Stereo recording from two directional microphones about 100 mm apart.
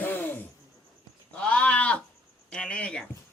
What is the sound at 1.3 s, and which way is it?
Sheep, 15° left (ahead or behind).